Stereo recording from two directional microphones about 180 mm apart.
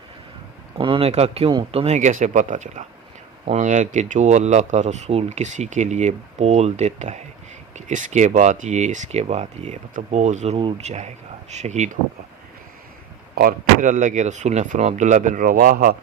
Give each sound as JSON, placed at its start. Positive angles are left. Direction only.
{"t": 0.8, "sound": "speech", "side_deg": -30}
{"t": 13.3, "sound": "speech", "side_deg": -55}